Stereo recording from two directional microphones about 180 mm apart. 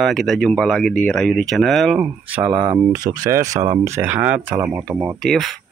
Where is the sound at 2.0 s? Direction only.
10° right (ahead or behind).